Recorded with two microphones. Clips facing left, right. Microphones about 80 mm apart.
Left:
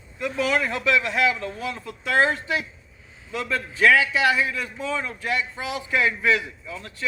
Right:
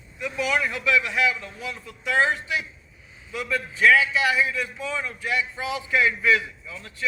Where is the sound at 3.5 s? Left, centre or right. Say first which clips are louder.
Even; left.